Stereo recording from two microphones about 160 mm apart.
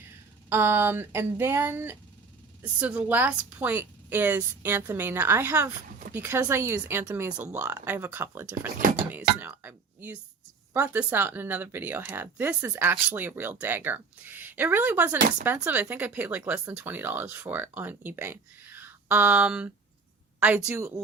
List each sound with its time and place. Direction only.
0.5 s speech: 15° right (ahead or behind)